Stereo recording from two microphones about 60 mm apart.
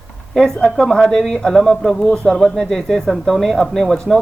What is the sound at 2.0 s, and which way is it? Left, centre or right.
Speech, centre.